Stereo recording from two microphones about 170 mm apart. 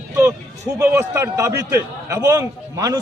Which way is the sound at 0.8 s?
15° right (ahead or behind).